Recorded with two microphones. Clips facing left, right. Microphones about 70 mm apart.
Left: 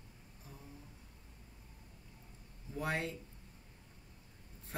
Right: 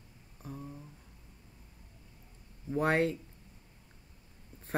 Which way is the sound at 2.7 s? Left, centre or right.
Right.